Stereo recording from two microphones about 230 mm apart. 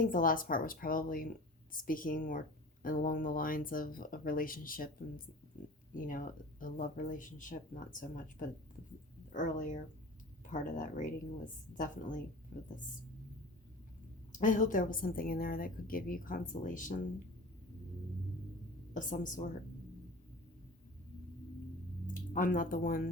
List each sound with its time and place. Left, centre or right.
0.0 s a woman's voice: left
14.3 s a woman's voice: left
18.9 s a woman's voice: left
22.0 s speech: left